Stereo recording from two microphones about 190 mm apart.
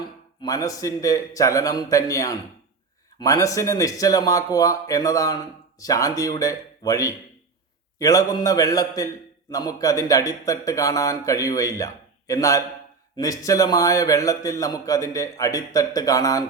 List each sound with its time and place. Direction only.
0.4 s a man's voice: 20° left (ahead or behind)